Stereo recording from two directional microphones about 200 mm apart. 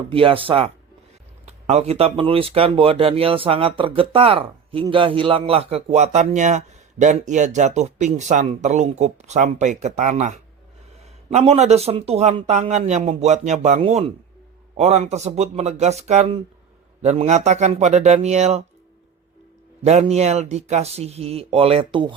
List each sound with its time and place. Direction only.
0.1 s speech: 25° right (ahead or behind)
19.8 s speech: 35° right (ahead or behind)